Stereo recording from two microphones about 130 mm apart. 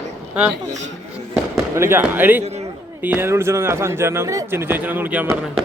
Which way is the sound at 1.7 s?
20° right (ahead or behind).